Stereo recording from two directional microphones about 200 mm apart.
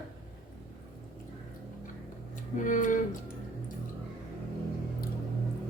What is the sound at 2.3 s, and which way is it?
Tick-tock, 40° left (ahead or behind).